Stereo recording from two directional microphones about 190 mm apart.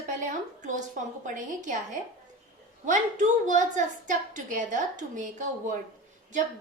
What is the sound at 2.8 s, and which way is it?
A woman's voice, 40° right (ahead or behind).